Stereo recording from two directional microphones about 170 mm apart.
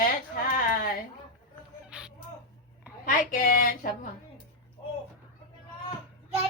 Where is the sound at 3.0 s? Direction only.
50° left (ahead or behind).